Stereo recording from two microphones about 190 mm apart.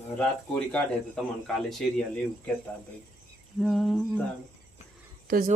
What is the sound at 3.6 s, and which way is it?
Speech, centre (ahead or behind).